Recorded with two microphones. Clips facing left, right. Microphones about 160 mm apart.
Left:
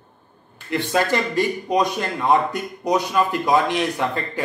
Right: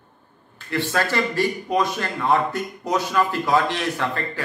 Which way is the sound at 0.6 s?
20° left (ahead or behind).